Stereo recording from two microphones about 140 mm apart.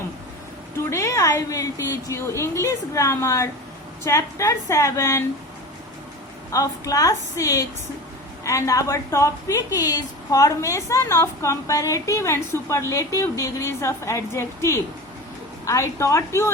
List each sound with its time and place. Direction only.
0.9 s a woman's voice: 20° left (ahead or behind)
6.5 s a woman's voice: 25° left (ahead or behind)